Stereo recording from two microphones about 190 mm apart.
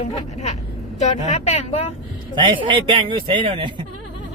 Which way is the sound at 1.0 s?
35° left (ahead or behind).